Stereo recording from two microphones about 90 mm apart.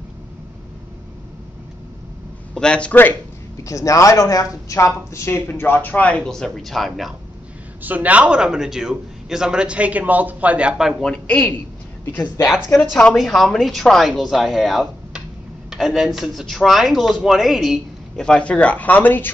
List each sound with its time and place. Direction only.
2.5 s speech: 10° left (ahead or behind)
3.6 s speech: 35° left (ahead or behind); by 6.9 s centre (ahead or behind)
7.8 s a man's voice: 15° right (ahead or behind)
11.0 s a man's voice: 10° left (ahead or behind)
13.1 s speech: centre (ahead or behind)
18.1 s speech: 10° left (ahead or behind)